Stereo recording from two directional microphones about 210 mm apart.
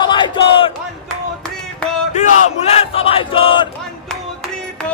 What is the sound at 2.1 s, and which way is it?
Battle cry, 30° left (ahead or behind).